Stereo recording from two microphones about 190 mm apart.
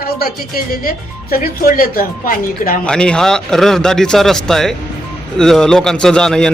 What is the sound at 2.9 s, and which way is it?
A man's voice, 5° left (ahead or behind).